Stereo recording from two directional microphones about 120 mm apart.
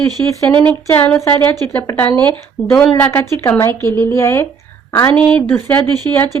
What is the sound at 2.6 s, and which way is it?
Speech, centre (ahead or behind).